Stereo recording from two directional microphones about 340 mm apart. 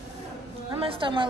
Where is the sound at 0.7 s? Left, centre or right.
Centre.